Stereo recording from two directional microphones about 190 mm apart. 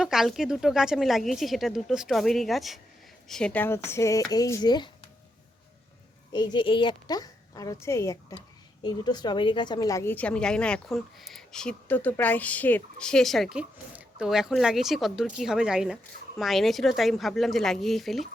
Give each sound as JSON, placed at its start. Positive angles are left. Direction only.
{"t": 0.0, "sound": "a woman's voice", "side_deg": 0}
{"t": 6.3, "sound": "a woman's voice", "side_deg": 25}